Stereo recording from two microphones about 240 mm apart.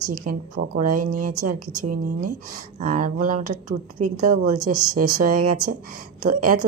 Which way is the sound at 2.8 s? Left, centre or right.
Right.